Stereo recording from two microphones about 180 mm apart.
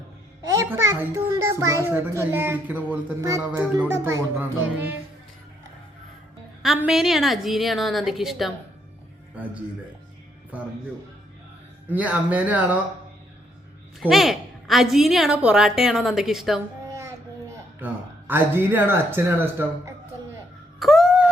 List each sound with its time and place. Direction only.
0.4 s a child's voice: 15° right (ahead or behind)
6.7 s a woman's voice: 5° right (ahead or behind)
11.9 s a child's voice: 10° right (ahead or behind)
14.0 s a woman's voice: centre (ahead or behind)
16.9 s speech: 15° right (ahead or behind)
20.7 s a sound: centre (ahead or behind)